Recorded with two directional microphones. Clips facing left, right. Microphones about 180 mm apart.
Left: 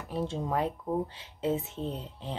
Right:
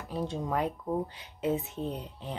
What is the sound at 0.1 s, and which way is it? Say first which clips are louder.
Speech: left 1 dB; 25° left (ahead or behind).